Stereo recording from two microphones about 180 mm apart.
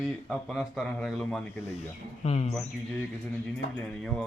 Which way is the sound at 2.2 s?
35° left (ahead or behind).